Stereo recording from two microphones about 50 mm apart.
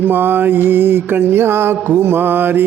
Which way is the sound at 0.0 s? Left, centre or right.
Right.